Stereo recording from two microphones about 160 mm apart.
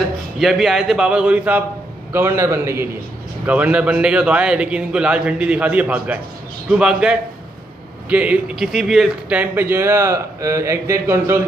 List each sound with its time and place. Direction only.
0.4 s a man's voice: centre (ahead or behind); by 11.4 s 15° right (ahead or behind)